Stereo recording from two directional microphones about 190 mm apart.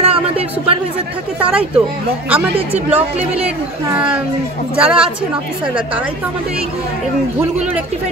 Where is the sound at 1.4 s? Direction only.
5° right (ahead or behind).